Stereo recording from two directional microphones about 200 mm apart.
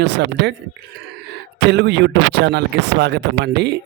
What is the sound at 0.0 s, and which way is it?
Speech, 60° right (ahead or behind).